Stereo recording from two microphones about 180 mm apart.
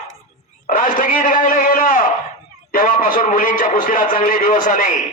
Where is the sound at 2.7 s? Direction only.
50° left (ahead or behind).